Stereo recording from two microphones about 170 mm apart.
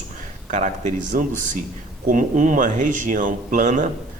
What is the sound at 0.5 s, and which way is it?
Speech, 45° right (ahead or behind).